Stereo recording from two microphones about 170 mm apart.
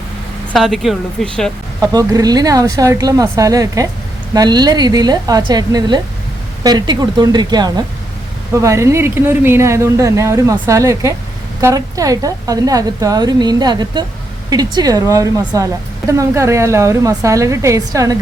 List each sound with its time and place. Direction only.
0.5 s speech: centre (ahead or behind)
1.8 s a woman's voice: 20° right (ahead or behind)